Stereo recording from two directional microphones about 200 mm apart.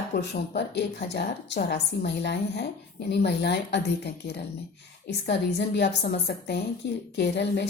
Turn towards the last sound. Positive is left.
turn(degrees=55)  # may be behind; listen again after turning